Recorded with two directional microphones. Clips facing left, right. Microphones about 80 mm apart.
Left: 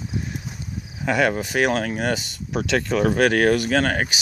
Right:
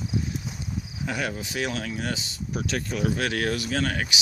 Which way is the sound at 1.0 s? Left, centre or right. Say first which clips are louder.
Left 10 dB; left.